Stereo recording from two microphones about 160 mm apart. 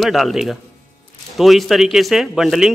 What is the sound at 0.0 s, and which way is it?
A man's voice, centre (ahead or behind).